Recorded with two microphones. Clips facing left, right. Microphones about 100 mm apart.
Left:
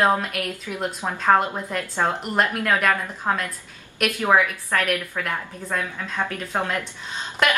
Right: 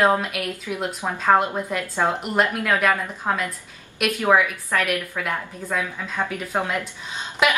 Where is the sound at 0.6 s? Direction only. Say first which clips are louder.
Right 2 dB; 15° right (ahead or behind).